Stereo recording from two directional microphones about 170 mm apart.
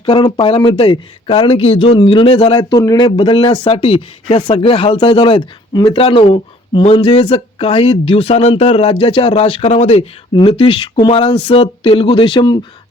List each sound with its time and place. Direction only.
0.0 s speech: 25° left (ahead or behind)